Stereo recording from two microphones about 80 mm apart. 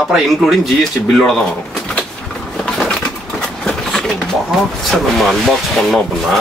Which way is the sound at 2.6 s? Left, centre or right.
Centre.